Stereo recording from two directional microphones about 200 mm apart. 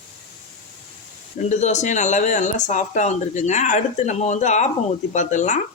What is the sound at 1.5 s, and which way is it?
Speech, 35° left (ahead or behind).